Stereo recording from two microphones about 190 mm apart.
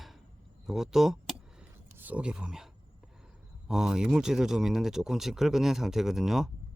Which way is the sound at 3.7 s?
5° right (ahead or behind).